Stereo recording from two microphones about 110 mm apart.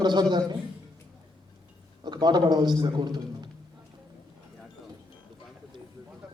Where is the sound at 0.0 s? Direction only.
40° right (ahead or behind).